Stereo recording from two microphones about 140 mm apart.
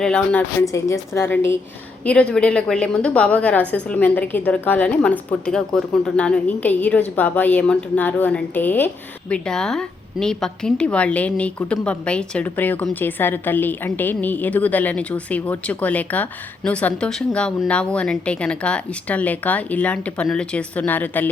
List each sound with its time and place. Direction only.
0.0 s a woman's voice: 5° left (ahead or behind)
0.6 s a woman's voice: 20° left (ahead or behind)